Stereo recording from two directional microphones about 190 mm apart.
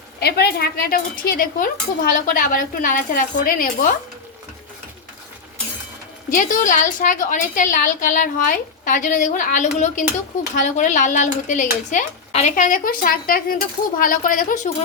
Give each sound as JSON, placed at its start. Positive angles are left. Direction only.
{"t": 0.2, "sound": "a woman's voice", "side_deg": 60}
{"t": 6.3, "sound": "a woman's voice", "side_deg": 45}